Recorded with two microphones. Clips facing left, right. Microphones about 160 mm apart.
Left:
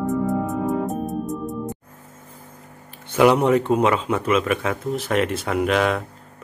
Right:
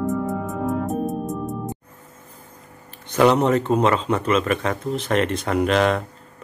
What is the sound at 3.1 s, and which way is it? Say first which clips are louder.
Speech: left 1 dB; 10° left (ahead or behind).